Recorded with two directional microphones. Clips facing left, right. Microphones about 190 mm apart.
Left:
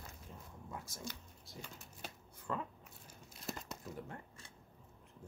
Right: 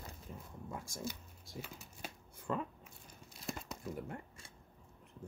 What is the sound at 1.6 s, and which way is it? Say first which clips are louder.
Shuffling cards: right 2 dB; 5° right (ahead or behind).